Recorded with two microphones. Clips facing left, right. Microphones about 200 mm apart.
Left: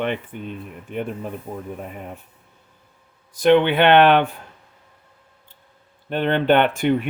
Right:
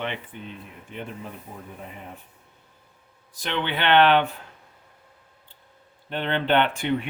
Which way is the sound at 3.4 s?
50° left (ahead or behind).